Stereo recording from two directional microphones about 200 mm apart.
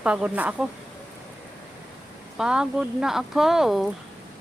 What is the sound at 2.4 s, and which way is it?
Speech, 5° right (ahead or behind).